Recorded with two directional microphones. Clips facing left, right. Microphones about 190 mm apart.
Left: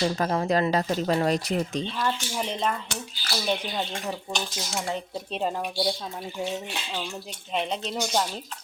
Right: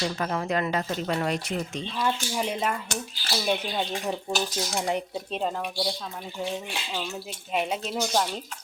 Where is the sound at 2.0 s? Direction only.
10° right (ahead or behind).